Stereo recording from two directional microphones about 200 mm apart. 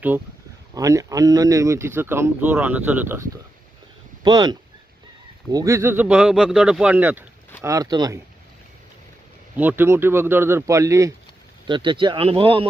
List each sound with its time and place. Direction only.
0.7 s speech: 15° right (ahead or behind)
4.2 s speech: 20° right (ahead or behind)
9.6 s speech: 10° right (ahead or behind); by 12.6 s 25° right (ahead or behind)